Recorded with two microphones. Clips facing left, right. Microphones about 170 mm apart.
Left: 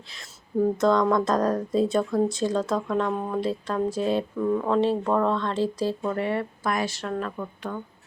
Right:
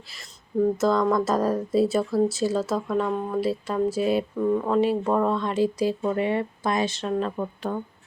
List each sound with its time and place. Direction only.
0.8 s a woman's voice: 5° right (ahead or behind); by 7.8 s 30° right (ahead or behind)